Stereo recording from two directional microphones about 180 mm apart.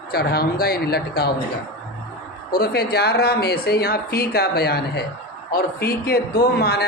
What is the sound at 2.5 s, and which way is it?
A man's voice, 60° left (ahead or behind).